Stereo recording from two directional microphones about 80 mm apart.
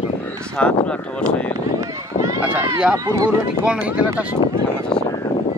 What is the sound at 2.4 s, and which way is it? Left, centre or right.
Speech, centre.